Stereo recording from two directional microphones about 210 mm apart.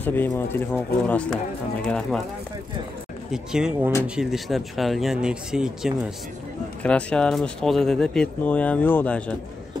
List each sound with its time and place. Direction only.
0.0 s speech: 10° left (ahead or behind)
3.3 s speech: 5° right (ahead or behind)